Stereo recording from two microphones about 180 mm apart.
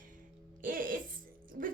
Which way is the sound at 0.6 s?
50° right (ahead or behind).